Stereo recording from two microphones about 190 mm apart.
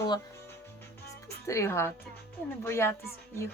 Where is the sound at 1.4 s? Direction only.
15° left (ahead or behind).